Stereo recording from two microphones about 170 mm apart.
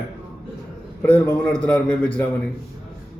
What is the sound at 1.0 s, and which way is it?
A man's voice, 10° left (ahead or behind).